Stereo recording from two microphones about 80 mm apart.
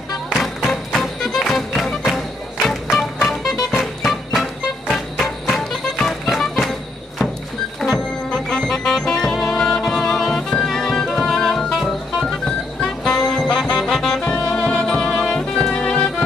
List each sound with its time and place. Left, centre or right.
0.3 s music: centre
7.8 s music: centre